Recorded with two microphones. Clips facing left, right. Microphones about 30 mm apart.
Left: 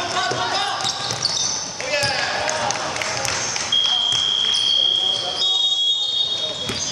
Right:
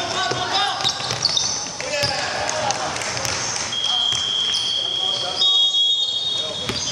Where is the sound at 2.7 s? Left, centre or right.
Centre.